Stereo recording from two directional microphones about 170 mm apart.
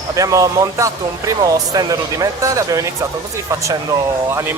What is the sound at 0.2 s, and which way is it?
Speech, 20° right (ahead or behind).